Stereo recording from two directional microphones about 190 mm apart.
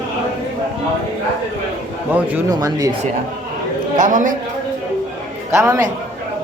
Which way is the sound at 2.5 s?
20° right (ahead or behind).